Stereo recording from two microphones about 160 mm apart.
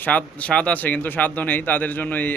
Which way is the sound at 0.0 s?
10° left (ahead or behind).